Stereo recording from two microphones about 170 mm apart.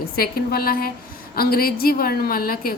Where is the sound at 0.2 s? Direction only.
60° left (ahead or behind).